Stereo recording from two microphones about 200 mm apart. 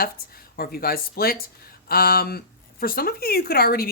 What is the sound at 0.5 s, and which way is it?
A woman's voice, 50° left (ahead or behind).